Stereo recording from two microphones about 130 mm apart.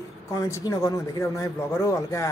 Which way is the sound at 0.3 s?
25° left (ahead or behind).